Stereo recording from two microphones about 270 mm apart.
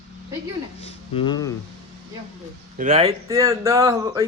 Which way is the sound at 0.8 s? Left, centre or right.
Left.